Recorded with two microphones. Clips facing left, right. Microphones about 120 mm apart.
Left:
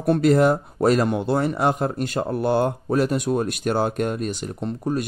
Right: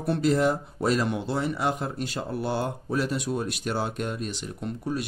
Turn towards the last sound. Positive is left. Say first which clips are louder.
# left 5 dB
turn(degrees=35)  # may be behind; listen again after turning